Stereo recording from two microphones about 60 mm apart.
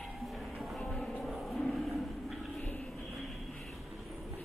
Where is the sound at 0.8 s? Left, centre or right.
Centre.